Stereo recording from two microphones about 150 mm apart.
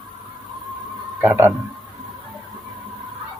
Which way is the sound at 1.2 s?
15° right (ahead or behind).